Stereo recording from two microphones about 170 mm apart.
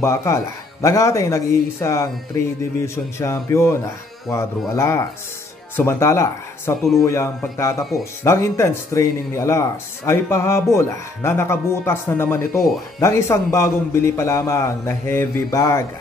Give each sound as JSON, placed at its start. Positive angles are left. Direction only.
{"t": 0.0, "sound": "speech", "side_deg": 15}
{"t": 6.8, "sound": "speech", "side_deg": 0}
{"t": 7.1, "sound": "speech", "side_deg": 15}